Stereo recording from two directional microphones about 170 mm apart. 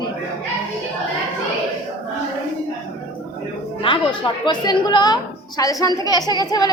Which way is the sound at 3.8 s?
30° left (ahead or behind).